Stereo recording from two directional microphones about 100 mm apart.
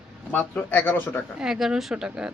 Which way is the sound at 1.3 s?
5° right (ahead or behind).